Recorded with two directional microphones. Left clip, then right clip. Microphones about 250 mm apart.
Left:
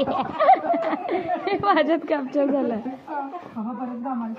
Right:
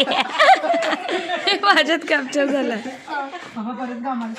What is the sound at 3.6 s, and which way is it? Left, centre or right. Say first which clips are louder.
Speech: right 4 dB; right.